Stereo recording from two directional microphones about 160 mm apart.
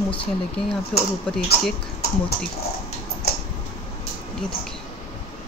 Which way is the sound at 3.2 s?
75° left (ahead or behind).